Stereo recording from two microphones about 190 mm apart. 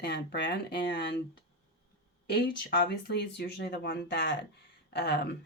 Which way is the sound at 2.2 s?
60° left (ahead or behind).